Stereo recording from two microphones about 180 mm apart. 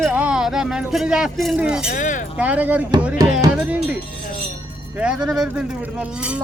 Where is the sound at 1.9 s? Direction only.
45° left (ahead or behind).